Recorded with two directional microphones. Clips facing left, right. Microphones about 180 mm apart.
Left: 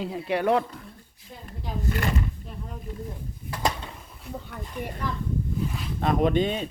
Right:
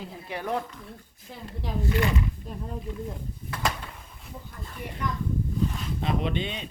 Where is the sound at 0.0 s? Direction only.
75° left (ahead or behind).